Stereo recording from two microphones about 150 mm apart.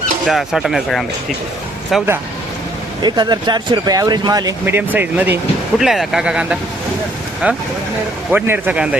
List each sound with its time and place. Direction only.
0.3 s speech: centre (ahead or behind)
3.0 s speech: 30° right (ahead or behind)
4.6 s speech: 15° right (ahead or behind)